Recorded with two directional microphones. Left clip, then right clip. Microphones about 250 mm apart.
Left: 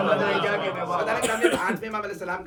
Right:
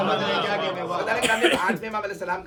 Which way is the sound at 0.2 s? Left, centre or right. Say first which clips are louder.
Even; left.